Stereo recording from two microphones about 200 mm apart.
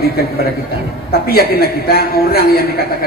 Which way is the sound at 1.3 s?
50° left (ahead or behind).